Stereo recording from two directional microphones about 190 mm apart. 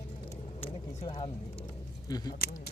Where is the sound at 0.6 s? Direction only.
30° left (ahead or behind).